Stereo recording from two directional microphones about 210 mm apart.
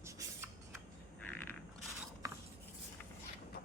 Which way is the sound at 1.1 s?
10° left (ahead or behind).